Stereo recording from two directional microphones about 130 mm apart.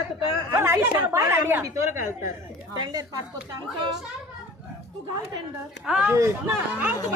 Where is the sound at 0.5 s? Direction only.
20° right (ahead or behind).